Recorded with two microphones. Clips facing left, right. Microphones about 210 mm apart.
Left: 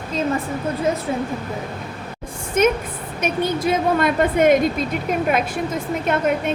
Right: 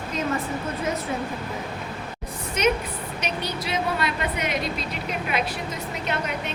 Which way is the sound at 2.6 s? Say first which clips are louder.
Left 6 dB; 50° left (ahead or behind).